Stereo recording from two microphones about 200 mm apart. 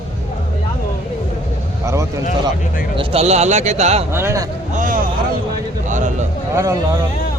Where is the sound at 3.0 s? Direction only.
30° right (ahead or behind).